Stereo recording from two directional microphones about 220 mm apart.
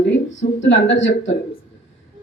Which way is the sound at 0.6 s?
55° left (ahead or behind).